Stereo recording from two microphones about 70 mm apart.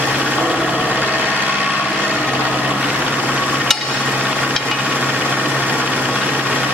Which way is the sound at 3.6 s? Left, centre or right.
Centre.